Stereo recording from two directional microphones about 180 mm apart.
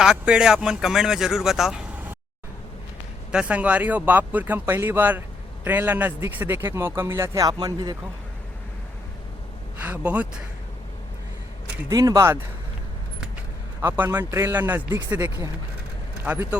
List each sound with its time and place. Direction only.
0.0 s speech: 5° right (ahead or behind)
3.3 s speech: 5° right (ahead or behind)
9.8 s speech: 10° right (ahead or behind)
11.9 s speech: 20° right (ahead or behind)
13.8 s speech: 10° right (ahead or behind)
16.2 s speech: 10° right (ahead or behind)